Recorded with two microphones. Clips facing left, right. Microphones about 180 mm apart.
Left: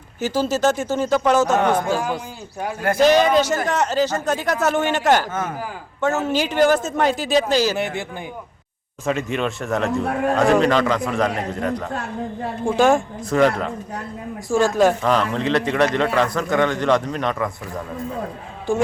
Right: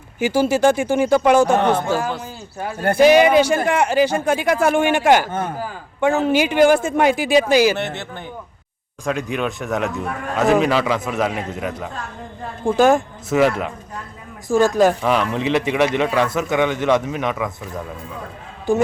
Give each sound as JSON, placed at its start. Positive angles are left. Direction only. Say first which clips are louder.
{"t": 0.2, "sound": "a man's voice", "louder": "right 4 dB", "side_deg": -10}
{"t": 2.0, "sound": "speech", "louder": "even", "side_deg": 10}
{"t": 3.0, "sound": "a man's voice", "louder": "right 3 dB", "side_deg": -10}
{"t": 7.8, "sound": "speech", "louder": "left 1 dB", "side_deg": 10}
{"t": 9.0, "sound": "a man's voice", "louder": "even", "side_deg": 0}
{"t": 10.1, "sound": "a man's voice", "louder": "left 7 dB", "side_deg": 60}
{"t": 10.3, "sound": "a man's voice", "louder": "right 1 dB", "side_deg": -5}